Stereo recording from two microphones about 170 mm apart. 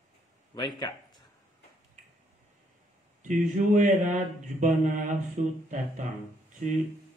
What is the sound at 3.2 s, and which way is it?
Mantra, 45° right (ahead or behind).